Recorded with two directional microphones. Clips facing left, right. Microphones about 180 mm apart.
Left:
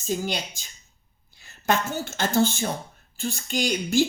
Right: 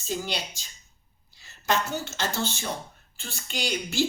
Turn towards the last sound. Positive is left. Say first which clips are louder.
# left 6 dB
turn(degrees=45)  # may be behind; listen again after turning